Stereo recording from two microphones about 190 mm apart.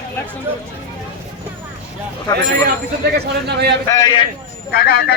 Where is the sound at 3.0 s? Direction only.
60° right (ahead or behind).